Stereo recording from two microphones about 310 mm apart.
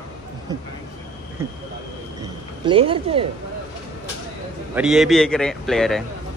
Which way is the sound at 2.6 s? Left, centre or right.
Centre.